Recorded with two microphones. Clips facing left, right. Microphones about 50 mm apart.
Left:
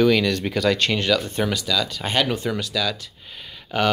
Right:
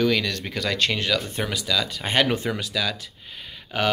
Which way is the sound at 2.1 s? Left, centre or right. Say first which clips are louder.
Right 1 dB; right.